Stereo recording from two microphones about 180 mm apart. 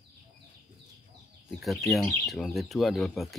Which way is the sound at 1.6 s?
Centre (ahead or behind).